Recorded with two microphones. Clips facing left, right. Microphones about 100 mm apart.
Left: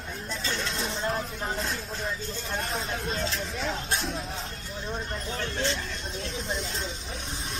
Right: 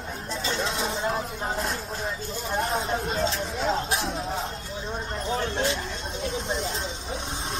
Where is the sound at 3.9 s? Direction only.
5° right (ahead or behind).